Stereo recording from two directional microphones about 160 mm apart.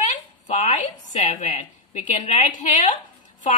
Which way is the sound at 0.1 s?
45° left (ahead or behind).